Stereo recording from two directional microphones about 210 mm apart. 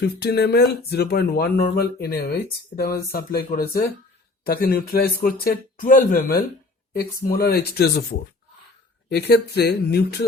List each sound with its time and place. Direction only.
0.2 s speech: 50° left (ahead or behind)
9.0 s speech: 50° left (ahead or behind)